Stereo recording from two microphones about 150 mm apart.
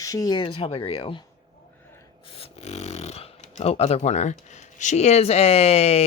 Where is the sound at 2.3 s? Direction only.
45° left (ahead or behind).